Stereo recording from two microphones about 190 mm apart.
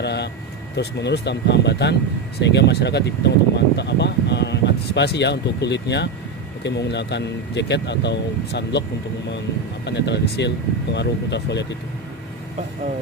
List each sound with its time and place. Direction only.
0.0 s speech: 65° left (ahead or behind)
9.8 s speech: 65° left (ahead or behind)